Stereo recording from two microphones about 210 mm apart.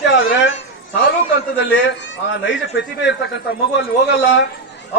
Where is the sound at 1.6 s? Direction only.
55° left (ahead or behind).